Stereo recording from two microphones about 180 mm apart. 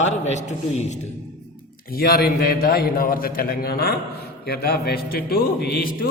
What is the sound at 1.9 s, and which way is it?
A man's voice, 55° left (ahead or behind).